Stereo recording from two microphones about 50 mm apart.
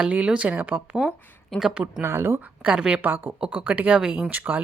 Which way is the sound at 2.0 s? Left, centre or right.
Right.